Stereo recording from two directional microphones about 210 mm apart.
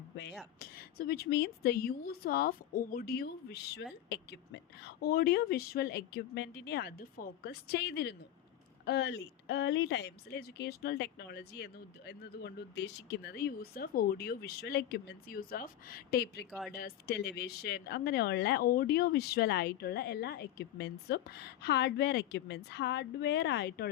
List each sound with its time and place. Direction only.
0.6 s speech: 45° left (ahead or behind)
16.5 s speech: centre (ahead or behind)
16.7 s speech: 45° left (ahead or behind)